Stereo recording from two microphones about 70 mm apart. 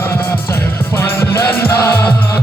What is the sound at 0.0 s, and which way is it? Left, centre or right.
Music, left.